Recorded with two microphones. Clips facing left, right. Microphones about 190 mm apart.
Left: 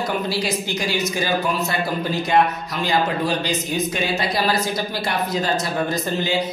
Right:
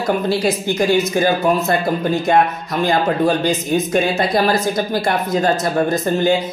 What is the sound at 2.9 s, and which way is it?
Speech, 50° right (ahead or behind).